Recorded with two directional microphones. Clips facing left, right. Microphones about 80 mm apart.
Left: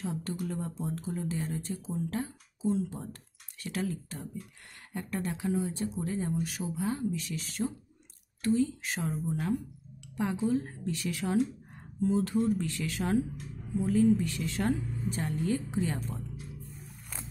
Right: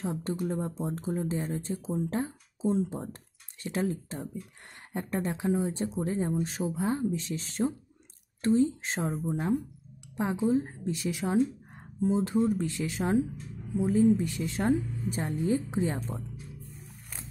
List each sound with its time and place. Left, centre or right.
0.0 s speech: right